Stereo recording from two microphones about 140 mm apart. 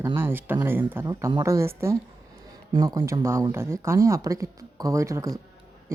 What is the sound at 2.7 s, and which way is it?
Speech, 30° right (ahead or behind).